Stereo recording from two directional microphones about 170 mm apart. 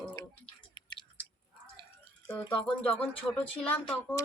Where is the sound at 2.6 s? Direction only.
5° left (ahead or behind).